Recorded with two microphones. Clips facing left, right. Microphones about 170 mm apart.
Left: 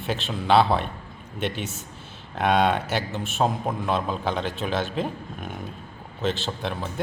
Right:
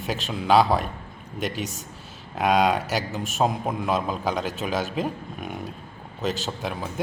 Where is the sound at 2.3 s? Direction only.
10° right (ahead or behind).